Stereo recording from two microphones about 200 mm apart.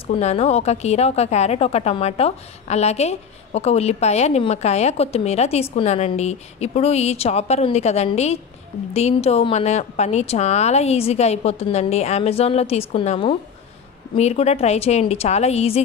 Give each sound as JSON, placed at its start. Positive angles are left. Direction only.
{"t": 0.0, "sound": "a woman's voice", "side_deg": 30}